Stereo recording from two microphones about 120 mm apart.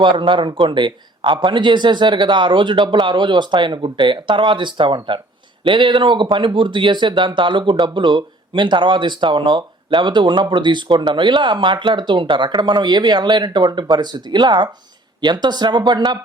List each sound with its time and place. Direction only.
0.0 s speech: 45° right (ahead or behind)